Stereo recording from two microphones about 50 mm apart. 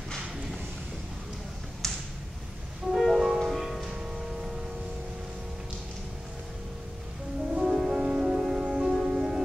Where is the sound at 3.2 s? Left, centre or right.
Centre.